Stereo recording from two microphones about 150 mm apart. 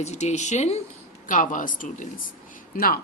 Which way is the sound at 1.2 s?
60° left (ahead or behind).